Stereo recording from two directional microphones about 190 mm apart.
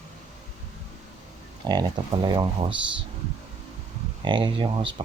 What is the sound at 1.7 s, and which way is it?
Speech, 25° right (ahead or behind).